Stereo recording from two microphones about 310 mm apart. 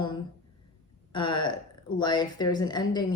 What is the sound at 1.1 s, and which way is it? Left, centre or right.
Speech, centre.